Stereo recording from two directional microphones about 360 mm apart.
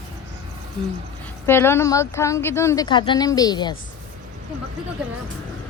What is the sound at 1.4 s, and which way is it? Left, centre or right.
A woman's voice, centre.